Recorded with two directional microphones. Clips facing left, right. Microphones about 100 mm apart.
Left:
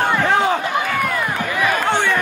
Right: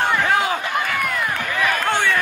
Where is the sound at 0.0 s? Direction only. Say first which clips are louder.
Left 2 dB; 15° left (ahead or behind).